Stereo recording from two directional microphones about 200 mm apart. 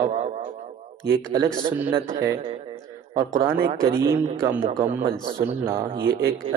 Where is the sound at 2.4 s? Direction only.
25° right (ahead or behind).